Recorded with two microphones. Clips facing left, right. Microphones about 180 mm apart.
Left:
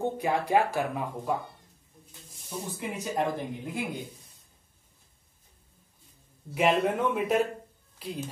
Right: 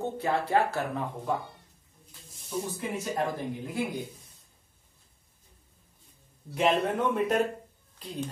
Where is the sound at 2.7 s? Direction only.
15° left (ahead or behind).